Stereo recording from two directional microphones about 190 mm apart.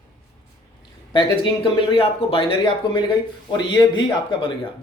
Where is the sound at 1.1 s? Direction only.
25° left (ahead or behind).